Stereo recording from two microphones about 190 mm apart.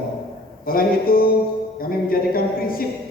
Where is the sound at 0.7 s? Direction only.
50° left (ahead or behind).